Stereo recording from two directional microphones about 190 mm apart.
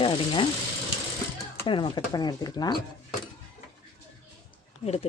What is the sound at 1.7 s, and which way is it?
Speech, 25° left (ahead or behind).